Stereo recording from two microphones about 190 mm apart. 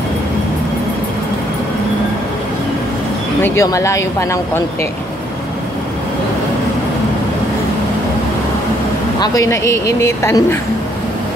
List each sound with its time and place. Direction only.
3.4 s speech: 15° left (ahead or behind)
9.2 s speech: 20° left (ahead or behind)